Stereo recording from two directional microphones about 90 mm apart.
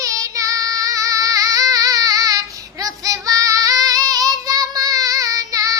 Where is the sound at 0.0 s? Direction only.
40° right (ahead or behind).